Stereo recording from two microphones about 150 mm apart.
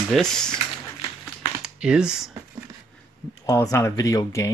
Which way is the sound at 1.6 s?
5° right (ahead or behind).